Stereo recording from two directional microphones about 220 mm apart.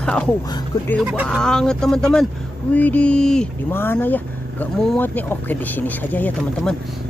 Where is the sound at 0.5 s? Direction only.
20° left (ahead or behind).